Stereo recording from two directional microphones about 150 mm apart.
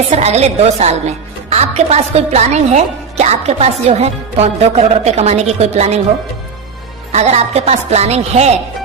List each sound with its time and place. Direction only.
0.1 s a woman's voice: 45° right (ahead or behind)
7.1 s a woman's voice: 45° right (ahead or behind)